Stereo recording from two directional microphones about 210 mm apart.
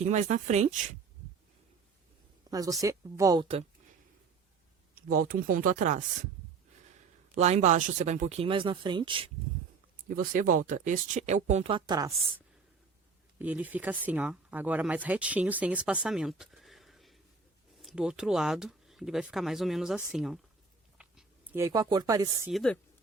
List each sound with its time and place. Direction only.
0.0 s speech: 35° right (ahead or behind)
2.5 s a woman's voice: 15° right (ahead or behind)
5.3 s speech: 40° right (ahead or behind)
7.3 s speech: 30° right (ahead or behind)
10.1 s speech: 40° right (ahead or behind); by 12.1 s 20° right (ahead or behind)
13.4 s speech: 10° right (ahead or behind)
22.5 s speech: 5° left (ahead or behind)